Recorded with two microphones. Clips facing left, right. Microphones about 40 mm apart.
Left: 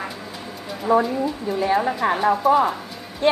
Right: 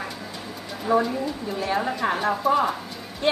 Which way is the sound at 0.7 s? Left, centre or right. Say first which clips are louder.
Left 3 dB; centre.